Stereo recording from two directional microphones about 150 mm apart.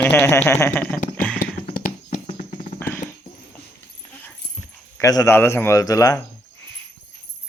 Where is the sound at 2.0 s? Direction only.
50° left (ahead or behind).